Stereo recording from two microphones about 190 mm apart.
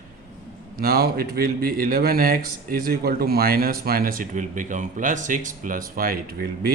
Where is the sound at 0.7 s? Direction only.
55° right (ahead or behind).